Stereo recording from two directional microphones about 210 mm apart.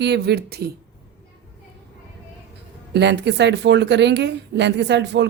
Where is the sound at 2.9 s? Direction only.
55° right (ahead or behind).